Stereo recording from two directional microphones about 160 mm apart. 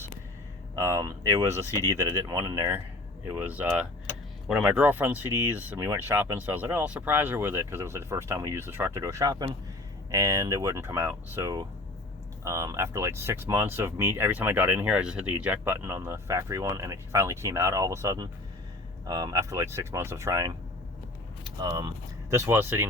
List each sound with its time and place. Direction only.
0.8 s speech: 20° right (ahead or behind)